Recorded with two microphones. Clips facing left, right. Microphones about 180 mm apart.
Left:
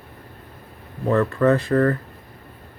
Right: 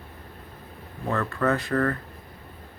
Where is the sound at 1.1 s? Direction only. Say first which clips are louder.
Left 7 dB; 30° left (ahead or behind).